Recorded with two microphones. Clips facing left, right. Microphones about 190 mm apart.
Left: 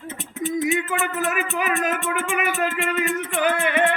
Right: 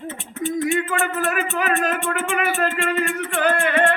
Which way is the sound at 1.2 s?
15° left (ahead or behind).